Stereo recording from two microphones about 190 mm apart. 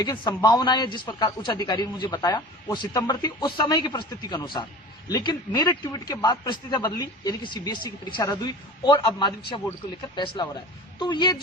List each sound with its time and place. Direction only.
0.0 s a man's voice: 20° left (ahead or behind)